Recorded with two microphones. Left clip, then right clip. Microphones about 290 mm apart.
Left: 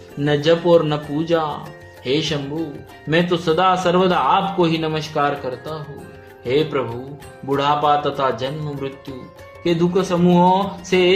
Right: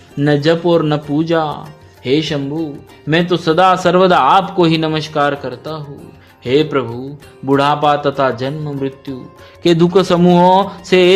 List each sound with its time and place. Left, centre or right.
0.2 s a man's voice: right